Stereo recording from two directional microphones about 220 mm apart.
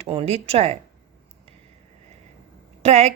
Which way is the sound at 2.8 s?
30° right (ahead or behind).